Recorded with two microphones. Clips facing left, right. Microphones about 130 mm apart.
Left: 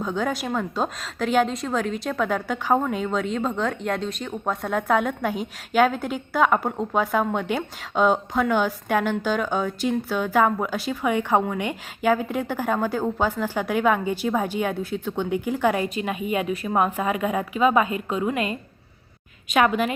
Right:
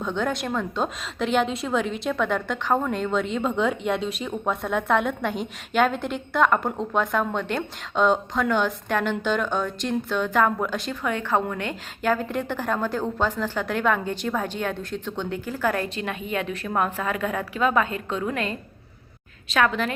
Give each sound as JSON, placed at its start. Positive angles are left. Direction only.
{"t": 0.0, "sound": "a woman's voice", "side_deg": 5}
{"t": 19.5, "sound": "a woman's voice", "side_deg": 10}